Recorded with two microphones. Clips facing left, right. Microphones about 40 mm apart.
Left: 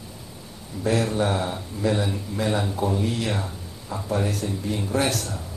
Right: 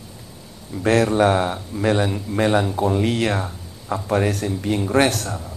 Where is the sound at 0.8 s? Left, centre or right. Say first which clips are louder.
Right 6 dB; right.